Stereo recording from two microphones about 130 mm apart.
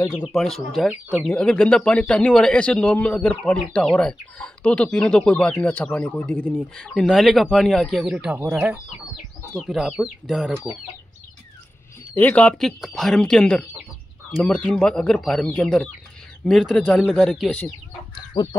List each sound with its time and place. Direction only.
0.3 s speech: centre (ahead or behind)
6.7 s speech: centre (ahead or behind)
8.4 s speech: 20° right (ahead or behind)
9.5 s speech: 5° left (ahead or behind)
9.8 s speech: 5° right (ahead or behind)
12.2 s speech: 10° left (ahead or behind)
18.3 s duck: 35° left (ahead or behind)